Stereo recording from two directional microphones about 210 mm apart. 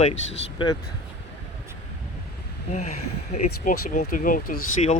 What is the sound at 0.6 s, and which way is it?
Speech, 20° left (ahead or behind).